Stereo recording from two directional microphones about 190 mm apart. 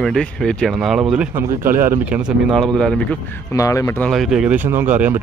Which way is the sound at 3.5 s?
15° left (ahead or behind).